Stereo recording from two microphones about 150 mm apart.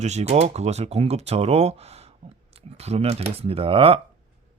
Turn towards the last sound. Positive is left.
turn(degrees=-40)  # may be behind; listen again after turning